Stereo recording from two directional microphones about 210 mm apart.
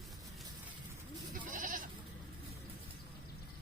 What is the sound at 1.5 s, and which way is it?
Goat, 40° right (ahead or behind).